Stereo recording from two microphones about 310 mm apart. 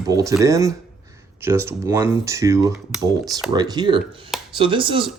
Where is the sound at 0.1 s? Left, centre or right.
Centre.